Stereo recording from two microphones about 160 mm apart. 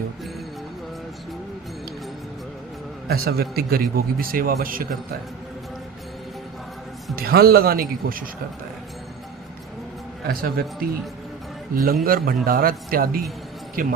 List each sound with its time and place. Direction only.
3.1 s a man's voice: 75° right (ahead or behind)
7.2 s a man's voice: 70° right (ahead or behind)
10.2 s a man's voice: 65° right (ahead or behind)